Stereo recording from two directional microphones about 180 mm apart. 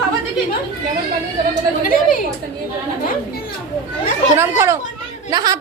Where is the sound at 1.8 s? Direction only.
50° left (ahead or behind).